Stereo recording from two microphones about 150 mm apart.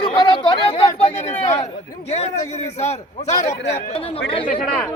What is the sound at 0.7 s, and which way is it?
Speech, 45° left (ahead or behind).